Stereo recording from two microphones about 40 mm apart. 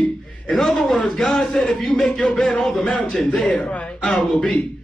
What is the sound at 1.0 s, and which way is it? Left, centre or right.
Speech, centre.